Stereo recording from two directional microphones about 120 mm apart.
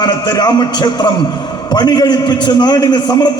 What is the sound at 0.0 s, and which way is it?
A man's voice, 35° left (ahead or behind).